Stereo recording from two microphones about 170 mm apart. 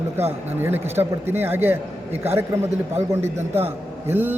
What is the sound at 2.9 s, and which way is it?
Speech, 15° right (ahead or behind).